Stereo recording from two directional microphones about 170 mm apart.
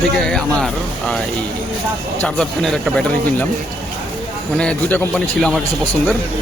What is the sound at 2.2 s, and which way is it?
Speech, 5° left (ahead or behind).